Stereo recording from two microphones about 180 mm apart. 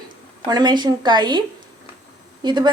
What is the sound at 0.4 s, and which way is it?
A woman's voice, 25° right (ahead or behind).